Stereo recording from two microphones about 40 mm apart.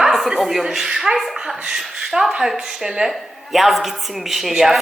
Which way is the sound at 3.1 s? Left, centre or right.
Centre.